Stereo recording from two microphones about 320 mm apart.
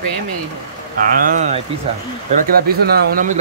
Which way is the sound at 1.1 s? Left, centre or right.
Right.